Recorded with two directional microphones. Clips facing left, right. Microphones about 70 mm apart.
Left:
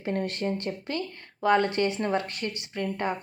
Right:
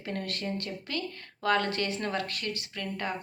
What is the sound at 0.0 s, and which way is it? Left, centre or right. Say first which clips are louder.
A woman's voice: left 6 dB; left.